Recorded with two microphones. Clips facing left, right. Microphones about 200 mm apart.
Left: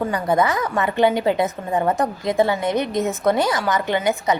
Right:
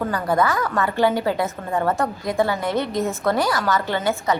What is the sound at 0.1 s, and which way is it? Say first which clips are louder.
A woman's voice: even; 20° left (ahead or behind).